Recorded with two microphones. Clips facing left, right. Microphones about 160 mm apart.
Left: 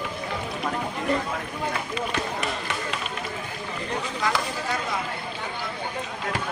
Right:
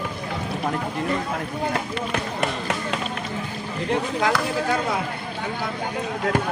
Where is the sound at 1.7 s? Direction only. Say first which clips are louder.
Right 3 dB; 70° right (ahead or behind).